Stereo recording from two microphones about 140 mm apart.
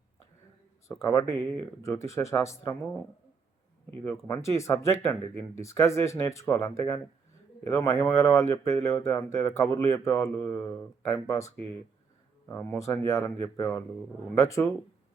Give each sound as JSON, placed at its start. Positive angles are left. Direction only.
{"t": 1.0, "sound": "speech", "side_deg": 20}
{"t": 4.4, "sound": "speech", "side_deg": 20}
{"t": 12.5, "sound": "speech", "side_deg": 20}